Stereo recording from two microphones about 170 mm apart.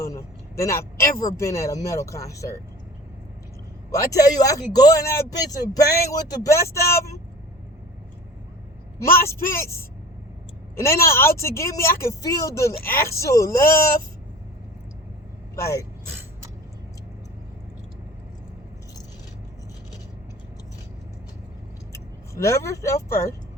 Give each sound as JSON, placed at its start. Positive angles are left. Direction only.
{"t": 0.0, "sound": "a man's voice", "side_deg": 15}
{"t": 3.9, "sound": "speech", "side_deg": 20}
{"t": 9.6, "sound": "speech", "side_deg": 15}
{"t": 15.5, "sound": "speech", "side_deg": 15}
{"t": 21.9, "sound": "speech", "side_deg": 15}